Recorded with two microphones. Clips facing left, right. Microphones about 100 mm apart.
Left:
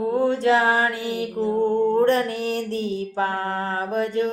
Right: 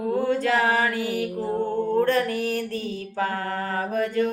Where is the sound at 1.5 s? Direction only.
25° left (ahead or behind).